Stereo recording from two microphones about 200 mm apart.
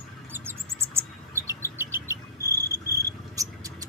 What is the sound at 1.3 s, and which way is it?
Mouse, 15° right (ahead or behind).